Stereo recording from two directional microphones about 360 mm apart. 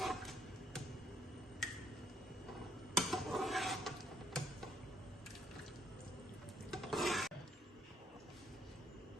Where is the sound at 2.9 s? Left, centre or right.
Centre.